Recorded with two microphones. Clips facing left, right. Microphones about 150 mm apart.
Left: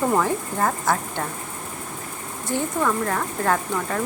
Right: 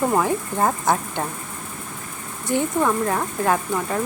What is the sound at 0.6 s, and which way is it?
Speech, 20° right (ahead or behind).